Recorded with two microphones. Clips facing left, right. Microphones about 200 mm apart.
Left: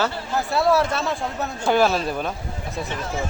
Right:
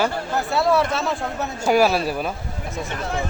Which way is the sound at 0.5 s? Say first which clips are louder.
Even; centre (ahead or behind).